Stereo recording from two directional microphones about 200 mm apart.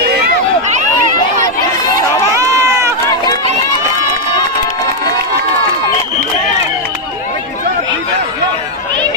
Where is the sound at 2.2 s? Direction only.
15° right (ahead or behind).